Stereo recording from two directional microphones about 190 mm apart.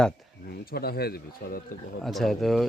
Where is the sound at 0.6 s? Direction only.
55° left (ahead or behind).